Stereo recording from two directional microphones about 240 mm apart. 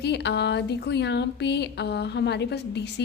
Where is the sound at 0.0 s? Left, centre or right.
Left.